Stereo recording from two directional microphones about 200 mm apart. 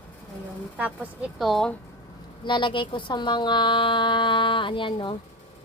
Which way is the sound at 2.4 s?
25° left (ahead or behind).